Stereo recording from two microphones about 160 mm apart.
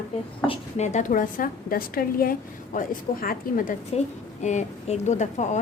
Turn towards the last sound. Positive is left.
turn(degrees=50)  # may be behind; listen again after turning